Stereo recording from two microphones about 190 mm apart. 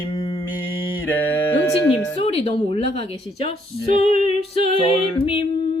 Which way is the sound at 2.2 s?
30° left (ahead or behind).